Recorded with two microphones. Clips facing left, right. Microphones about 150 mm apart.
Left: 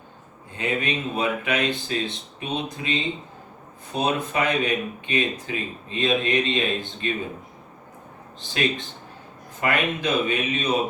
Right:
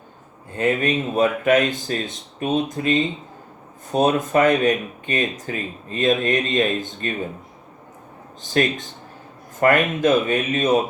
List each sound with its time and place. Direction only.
0.5 s speech: 45° right (ahead or behind)
8.4 s speech: 45° right (ahead or behind)